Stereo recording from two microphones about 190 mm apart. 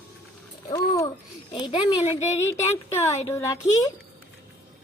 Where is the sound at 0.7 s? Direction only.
15° left (ahead or behind).